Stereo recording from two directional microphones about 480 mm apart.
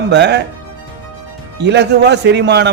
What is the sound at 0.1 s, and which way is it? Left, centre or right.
Speech, right.